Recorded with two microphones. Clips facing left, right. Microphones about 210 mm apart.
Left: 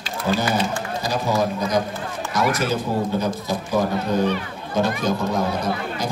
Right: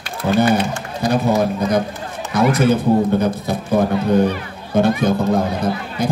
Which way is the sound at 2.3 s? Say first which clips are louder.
Right 7 dB; 60° right (ahead or behind).